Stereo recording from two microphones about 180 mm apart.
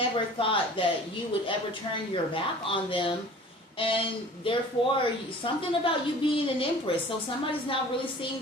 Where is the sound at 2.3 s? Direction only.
30° left (ahead or behind).